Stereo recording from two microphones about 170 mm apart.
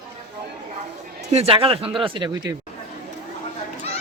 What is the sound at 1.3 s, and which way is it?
Speech, 35° right (ahead or behind).